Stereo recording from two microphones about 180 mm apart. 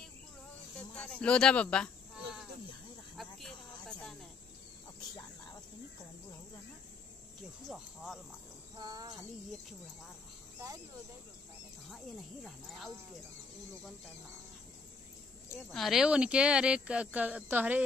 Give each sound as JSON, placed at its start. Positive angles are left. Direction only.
{"t": 0.7, "sound": "insect", "side_deg": 5}
{"t": 3.2, "sound": "snake", "side_deg": 0}
{"t": 7.6, "sound": "speech", "side_deg": 0}
{"t": 8.7, "sound": "cricket", "side_deg": -20}
{"t": 9.5, "sound": "speech", "side_deg": 0}
{"t": 12.4, "sound": "speech", "side_deg": 0}
{"t": 15.7, "sound": "speech", "side_deg": 0}